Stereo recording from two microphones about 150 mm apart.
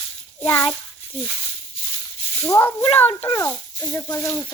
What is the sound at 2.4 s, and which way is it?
Speech, 15° left (ahead or behind).